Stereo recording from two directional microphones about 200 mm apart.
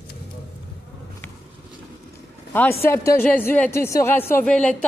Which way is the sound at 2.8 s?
10° left (ahead or behind).